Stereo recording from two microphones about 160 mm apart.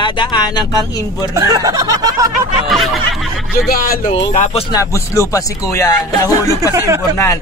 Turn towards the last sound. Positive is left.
turn(degrees=-20)  # may be behind; listen again after turning